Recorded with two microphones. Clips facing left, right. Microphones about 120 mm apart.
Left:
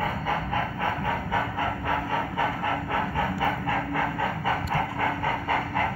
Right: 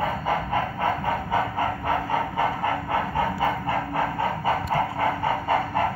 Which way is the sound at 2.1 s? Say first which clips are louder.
Right 3 dB; 25° right (ahead or behind).